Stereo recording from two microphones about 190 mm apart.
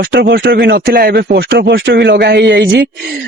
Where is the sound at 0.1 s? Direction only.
55° right (ahead or behind).